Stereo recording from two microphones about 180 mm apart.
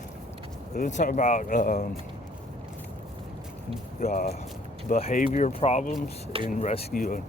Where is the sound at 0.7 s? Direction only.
45° left (ahead or behind).